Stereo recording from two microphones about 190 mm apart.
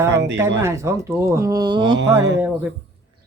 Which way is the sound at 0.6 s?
15° right (ahead or behind).